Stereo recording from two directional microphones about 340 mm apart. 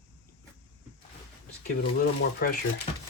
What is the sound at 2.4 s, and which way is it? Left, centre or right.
Speech, left.